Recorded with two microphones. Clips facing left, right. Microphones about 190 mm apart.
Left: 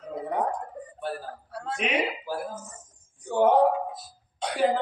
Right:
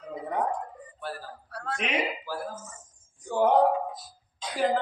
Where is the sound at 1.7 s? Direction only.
Centre (ahead or behind).